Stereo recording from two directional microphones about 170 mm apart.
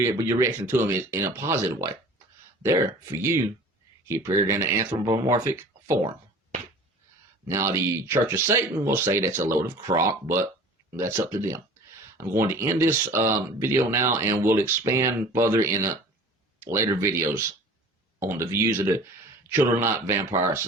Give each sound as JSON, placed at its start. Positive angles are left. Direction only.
{"t": 0.0, "sound": "speech", "side_deg": -15}
{"t": 7.4, "sound": "speech", "side_deg": -15}
{"t": 18.3, "sound": "speech", "side_deg": -15}